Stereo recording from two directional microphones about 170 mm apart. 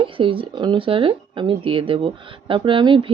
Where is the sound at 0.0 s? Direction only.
30° right (ahead or behind).